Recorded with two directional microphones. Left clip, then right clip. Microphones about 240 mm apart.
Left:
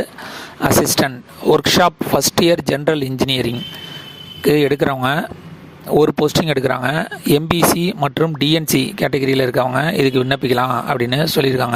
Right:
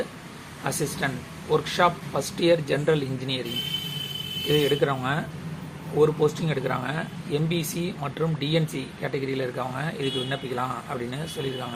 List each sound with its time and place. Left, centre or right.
1.0 s speech: left
4.5 s speech: left